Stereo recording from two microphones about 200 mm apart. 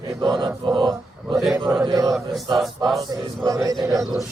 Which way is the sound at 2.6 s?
Centre (ahead or behind).